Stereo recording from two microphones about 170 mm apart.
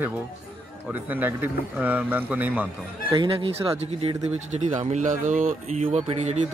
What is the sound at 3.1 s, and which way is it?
Speech, 30° right (ahead or behind).